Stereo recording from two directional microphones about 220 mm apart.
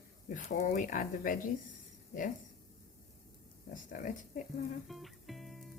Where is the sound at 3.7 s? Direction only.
35° left (ahead or behind).